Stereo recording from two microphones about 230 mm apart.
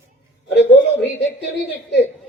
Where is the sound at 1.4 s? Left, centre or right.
Left.